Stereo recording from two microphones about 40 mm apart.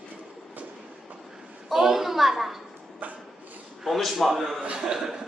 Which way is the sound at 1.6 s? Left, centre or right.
Centre.